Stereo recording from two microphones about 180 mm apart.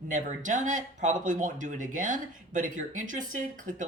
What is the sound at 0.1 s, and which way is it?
Speech, 45° right (ahead or behind).